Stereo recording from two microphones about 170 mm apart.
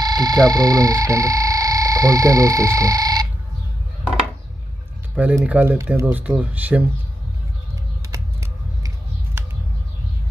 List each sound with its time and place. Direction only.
0.0 s speech: 25° right (ahead or behind)
5.1 s speech: 5° right (ahead or behind)
8.1 s typing: 15° right (ahead or behind)